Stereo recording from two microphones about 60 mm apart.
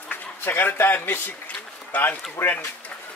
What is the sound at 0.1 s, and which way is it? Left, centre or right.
A man's voice, left.